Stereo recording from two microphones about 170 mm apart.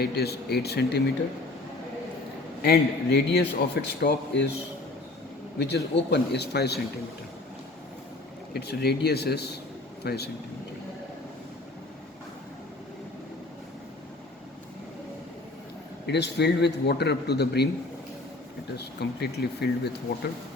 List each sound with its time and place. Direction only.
0.0 s a man's voice: 70° left (ahead or behind)
2.6 s a man's voice: 75° left (ahead or behind)
5.5 s a man's voice: 80° left
8.5 s a man's voice: 70° left (ahead or behind)
16.0 s a man's voice: 80° left
18.8 s a man's voice: 75° left (ahead or behind)